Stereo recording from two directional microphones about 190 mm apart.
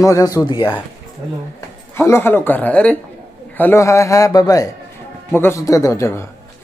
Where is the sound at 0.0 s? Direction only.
20° left (ahead or behind).